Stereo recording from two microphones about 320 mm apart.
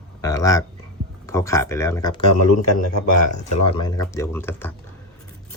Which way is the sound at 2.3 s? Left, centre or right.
Left.